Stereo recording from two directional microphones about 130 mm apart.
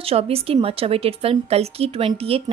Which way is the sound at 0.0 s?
50° right (ahead or behind).